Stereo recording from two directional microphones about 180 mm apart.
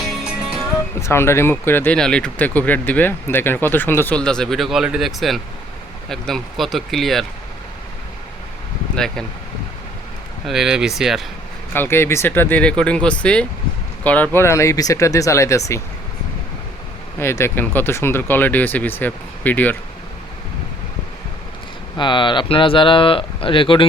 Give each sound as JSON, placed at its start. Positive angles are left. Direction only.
{"t": 1.0, "sound": "speech", "side_deg": 15}
{"t": 9.0, "sound": "speech", "side_deg": 5}
{"t": 10.4, "sound": "speech", "side_deg": -5}
{"t": 11.7, "sound": "speech", "side_deg": 10}
{"t": 17.2, "sound": "speech", "side_deg": 15}
{"t": 21.9, "sound": "speech", "side_deg": 25}